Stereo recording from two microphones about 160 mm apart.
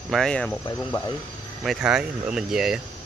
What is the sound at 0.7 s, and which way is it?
Speech, 15° left (ahead or behind).